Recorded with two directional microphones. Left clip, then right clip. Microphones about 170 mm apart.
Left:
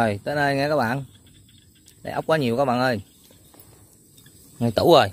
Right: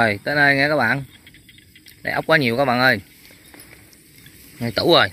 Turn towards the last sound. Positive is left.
turn(degrees=30)  # may be behind; listen again after turning